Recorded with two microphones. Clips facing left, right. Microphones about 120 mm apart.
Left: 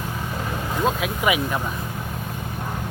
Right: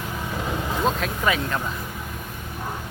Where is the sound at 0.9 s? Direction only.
10° left (ahead or behind).